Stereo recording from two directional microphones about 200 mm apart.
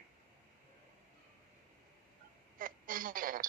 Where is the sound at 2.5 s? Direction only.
45° right (ahead or behind).